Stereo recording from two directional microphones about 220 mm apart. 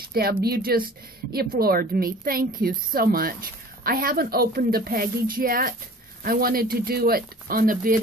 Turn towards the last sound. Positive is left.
turn(degrees=-40)  # may be behind; listen again after turning